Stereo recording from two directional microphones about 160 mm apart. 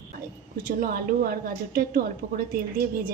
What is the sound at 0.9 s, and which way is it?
A woman's voice, 65° right (ahead or behind).